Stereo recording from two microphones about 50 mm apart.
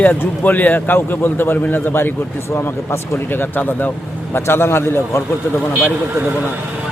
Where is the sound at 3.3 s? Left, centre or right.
Left.